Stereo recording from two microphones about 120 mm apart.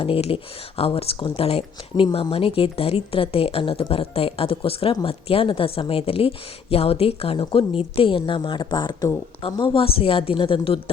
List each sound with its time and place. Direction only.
0.0 s a woman's voice: 55° left (ahead or behind)